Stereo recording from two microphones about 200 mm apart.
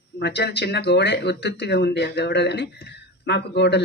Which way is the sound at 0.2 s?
55° left (ahead or behind).